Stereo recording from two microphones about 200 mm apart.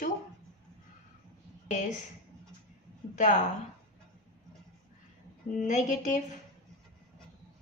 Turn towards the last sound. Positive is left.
turn(degrees=40)  # may be behind; listen again after turning